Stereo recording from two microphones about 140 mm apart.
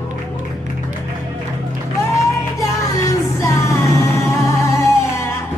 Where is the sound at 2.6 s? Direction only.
25° left (ahead or behind).